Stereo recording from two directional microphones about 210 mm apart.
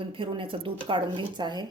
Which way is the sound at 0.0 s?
25° right (ahead or behind).